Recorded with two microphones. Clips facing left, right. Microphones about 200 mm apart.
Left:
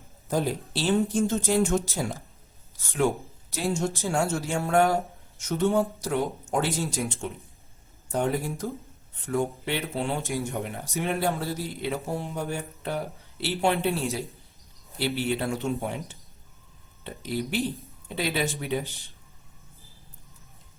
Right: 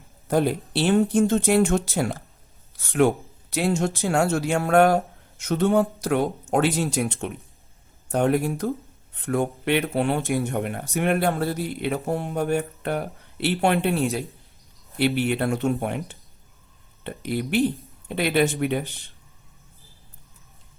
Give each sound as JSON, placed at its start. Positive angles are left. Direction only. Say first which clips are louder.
{"t": 0.3, "sound": "speech", "louder": "right 5 dB", "side_deg": -65}